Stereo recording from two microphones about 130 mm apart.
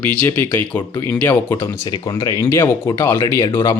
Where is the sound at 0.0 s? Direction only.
10° left (ahead or behind).